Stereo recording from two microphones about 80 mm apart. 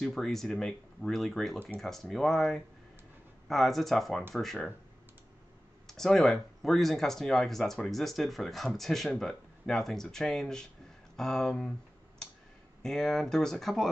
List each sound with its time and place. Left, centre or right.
0.0 s speech: centre
5.9 s speech: centre
12.8 s speech: centre